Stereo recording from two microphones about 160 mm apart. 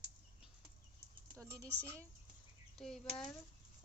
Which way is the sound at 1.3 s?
20° right (ahead or behind).